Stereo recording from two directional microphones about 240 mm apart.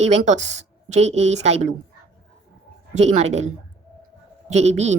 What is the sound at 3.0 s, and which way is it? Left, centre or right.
Speech, right.